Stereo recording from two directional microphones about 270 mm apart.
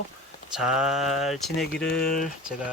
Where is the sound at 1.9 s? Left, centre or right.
Left.